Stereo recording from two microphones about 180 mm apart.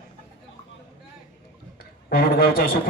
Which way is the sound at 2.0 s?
55° left (ahead or behind).